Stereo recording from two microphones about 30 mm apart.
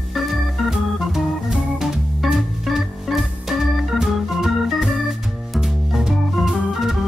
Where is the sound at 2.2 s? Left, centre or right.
Centre.